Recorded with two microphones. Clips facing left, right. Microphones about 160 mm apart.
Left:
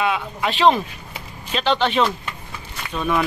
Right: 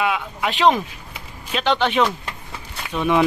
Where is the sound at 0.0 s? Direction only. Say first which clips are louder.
Even; 10° right (ahead or behind).